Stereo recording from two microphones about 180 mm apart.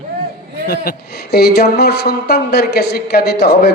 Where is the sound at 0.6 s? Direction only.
60° left (ahead or behind).